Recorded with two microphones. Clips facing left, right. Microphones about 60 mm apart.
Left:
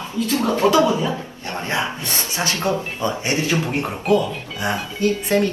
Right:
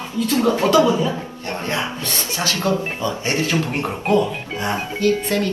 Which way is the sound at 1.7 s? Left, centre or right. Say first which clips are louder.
Left 3 dB; left.